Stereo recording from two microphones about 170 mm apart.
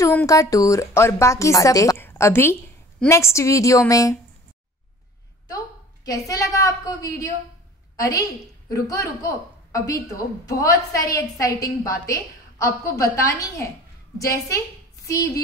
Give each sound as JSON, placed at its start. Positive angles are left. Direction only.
{"t": 0.0, "sound": "a woman's voice", "side_deg": 15}
{"t": 6.0, "sound": "a woman's voice", "side_deg": 20}